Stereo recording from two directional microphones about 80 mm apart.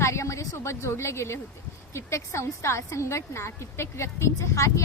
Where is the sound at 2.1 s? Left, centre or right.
Left.